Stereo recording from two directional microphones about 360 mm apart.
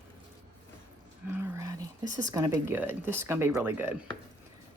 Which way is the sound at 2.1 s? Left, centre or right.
Centre.